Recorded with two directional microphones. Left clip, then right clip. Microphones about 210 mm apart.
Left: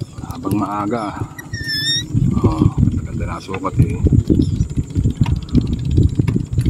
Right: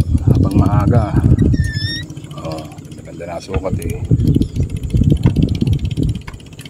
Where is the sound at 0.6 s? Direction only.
5° right (ahead or behind).